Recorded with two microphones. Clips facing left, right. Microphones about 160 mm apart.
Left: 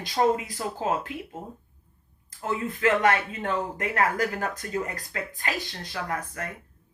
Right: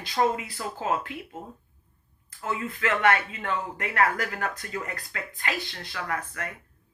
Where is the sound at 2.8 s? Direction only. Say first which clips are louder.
Left 2 dB; 40° left (ahead or behind).